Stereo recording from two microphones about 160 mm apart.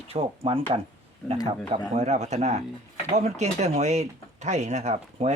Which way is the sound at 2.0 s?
45° right (ahead or behind).